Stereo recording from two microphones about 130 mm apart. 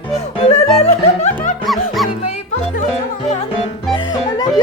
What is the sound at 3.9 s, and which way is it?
Music, 35° left (ahead or behind).